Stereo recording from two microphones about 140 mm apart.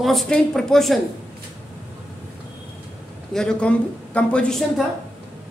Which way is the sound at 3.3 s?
5° left (ahead or behind).